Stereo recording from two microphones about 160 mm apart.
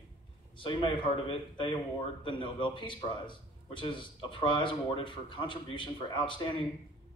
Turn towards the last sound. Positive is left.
turn(degrees=30)  # may be behind; listen again after turning